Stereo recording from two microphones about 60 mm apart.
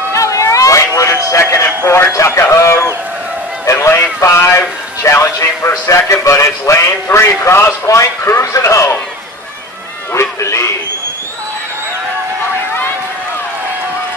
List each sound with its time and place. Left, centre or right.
0.1 s vehicle: left
1.3 s a man's voice: left
10.1 s a sound: left